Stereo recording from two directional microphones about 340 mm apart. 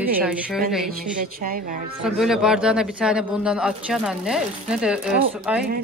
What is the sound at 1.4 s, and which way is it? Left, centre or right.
Speech, right.